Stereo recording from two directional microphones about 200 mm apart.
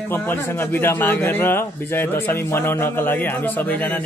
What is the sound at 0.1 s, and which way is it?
A man's voice, 10° left (ahead or behind).